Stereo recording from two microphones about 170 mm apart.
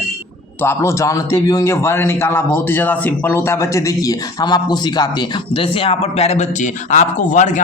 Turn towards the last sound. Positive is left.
turn(degrees=45)  # may be behind; listen again after turning